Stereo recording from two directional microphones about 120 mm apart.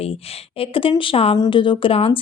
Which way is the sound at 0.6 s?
50° left (ahead or behind).